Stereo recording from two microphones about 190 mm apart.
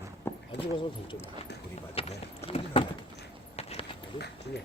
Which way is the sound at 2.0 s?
30° left (ahead or behind).